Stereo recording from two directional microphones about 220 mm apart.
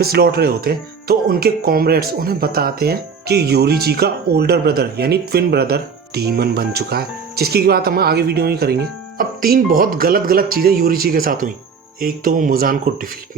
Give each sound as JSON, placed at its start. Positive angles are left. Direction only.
{"t": 0.0, "sound": "speech", "side_deg": -45}